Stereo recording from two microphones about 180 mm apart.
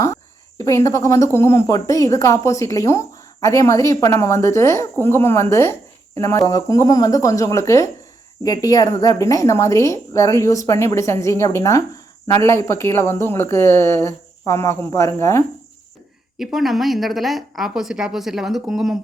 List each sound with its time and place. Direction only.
0.6 s a woman's voice: 15° left (ahead or behind)
16.4 s speech: centre (ahead or behind)